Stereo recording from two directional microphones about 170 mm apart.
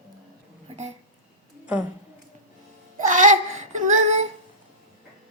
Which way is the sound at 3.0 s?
45° right (ahead or behind).